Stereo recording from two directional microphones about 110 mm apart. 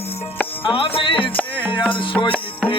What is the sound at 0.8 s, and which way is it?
Music, 55° left (ahead or behind).